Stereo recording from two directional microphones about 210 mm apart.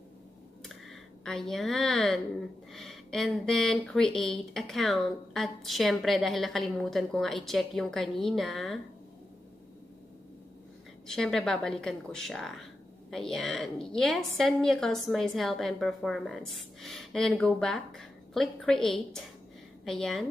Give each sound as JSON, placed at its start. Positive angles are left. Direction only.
{"t": 1.2, "sound": "speech", "side_deg": 0}
{"t": 11.1, "sound": "a woman's voice", "side_deg": 0}